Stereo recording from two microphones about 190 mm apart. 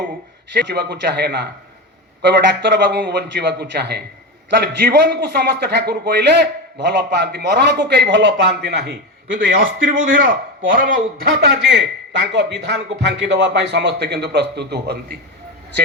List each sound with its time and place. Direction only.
0.7 s a man's voice: 55° right (ahead or behind)
2.5 s a man's voice: 65° right (ahead or behind)